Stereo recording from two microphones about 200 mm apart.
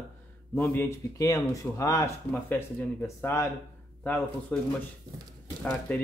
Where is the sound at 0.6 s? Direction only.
10° left (ahead or behind).